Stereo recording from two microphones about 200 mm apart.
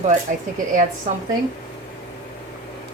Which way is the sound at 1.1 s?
35° right (ahead or behind).